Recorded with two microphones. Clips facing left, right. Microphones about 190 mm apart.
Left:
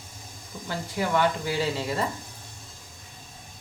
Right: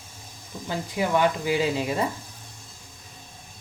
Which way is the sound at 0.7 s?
15° right (ahead or behind).